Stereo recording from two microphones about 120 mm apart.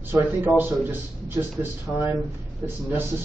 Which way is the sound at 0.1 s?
15° right (ahead or behind).